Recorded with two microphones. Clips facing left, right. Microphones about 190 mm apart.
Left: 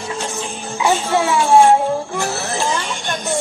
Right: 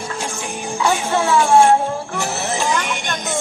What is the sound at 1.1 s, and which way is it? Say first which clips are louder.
Speech: even; 15° left (ahead or behind).